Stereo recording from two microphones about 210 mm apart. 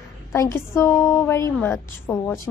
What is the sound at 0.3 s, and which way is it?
A woman's voice, 15° left (ahead or behind).